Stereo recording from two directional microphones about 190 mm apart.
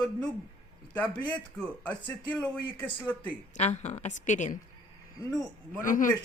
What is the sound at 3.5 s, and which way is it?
Speech, 35° left (ahead or behind).